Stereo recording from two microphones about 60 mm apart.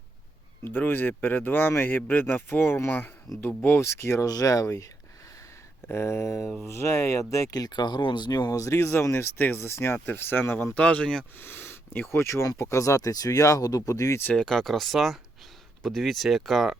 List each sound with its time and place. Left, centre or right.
0.6 s speech: left
3.3 s speech: centre
3.8 s speech: left
5.9 s speech: left
10.8 s speech: left
11.3 s speech: left
14.3 s speech: centre